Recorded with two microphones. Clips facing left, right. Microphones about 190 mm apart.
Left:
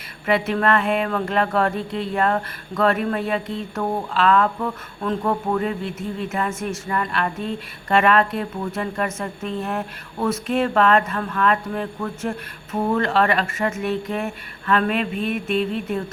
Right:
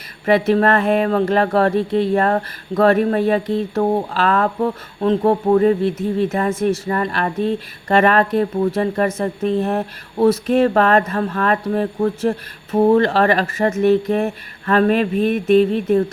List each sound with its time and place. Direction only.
0.3 s speech: 35° right (ahead or behind)